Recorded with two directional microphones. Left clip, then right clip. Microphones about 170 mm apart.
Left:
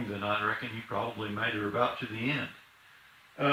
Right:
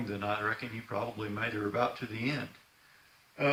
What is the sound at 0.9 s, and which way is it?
Speech, 40° right (ahead or behind).